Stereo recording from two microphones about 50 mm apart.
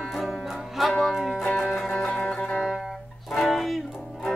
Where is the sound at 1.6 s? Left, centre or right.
Centre.